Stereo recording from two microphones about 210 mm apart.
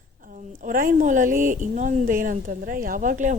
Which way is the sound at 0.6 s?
40° right (ahead or behind).